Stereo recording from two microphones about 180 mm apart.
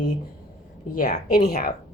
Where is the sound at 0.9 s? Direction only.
45° left (ahead or behind).